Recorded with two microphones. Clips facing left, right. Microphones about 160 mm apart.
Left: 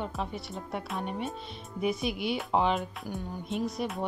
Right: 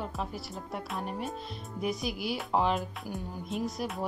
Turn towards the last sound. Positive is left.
turn(degrees=0)  # may be behind; listen again after turning